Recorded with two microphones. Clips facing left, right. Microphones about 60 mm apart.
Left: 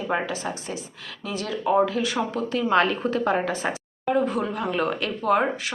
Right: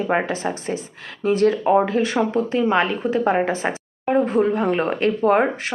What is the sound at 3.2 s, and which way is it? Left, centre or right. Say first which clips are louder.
A woman's voice: right 5 dB; right.